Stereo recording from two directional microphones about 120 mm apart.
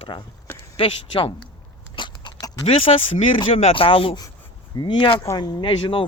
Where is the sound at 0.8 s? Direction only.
45° left (ahead or behind).